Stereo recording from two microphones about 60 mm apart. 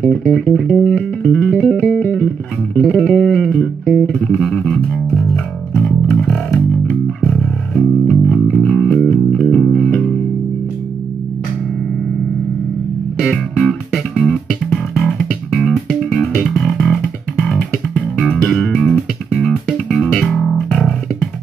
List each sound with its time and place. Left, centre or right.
0.0 s music: centre
1.2 s music: centre
2.1 s music: left
3.1 s music: centre
13.7 s music: centre
17.4 s bass guitar: centre
19.3 s music: centre